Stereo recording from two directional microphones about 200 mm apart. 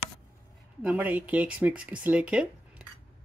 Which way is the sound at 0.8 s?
10° right (ahead or behind).